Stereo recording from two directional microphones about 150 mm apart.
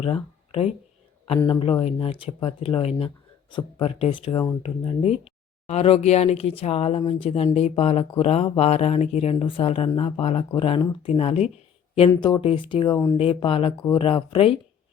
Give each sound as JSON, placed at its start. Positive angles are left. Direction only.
{"t": 0.0, "sound": "speech", "side_deg": 40}